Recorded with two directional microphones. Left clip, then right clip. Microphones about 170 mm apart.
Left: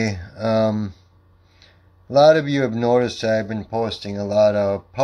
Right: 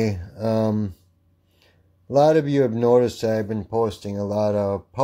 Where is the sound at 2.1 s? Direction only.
30° right (ahead or behind).